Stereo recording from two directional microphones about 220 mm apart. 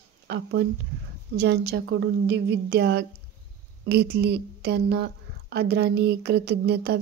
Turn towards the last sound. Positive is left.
turn(degrees=-45)  # may be behind; listen again after turning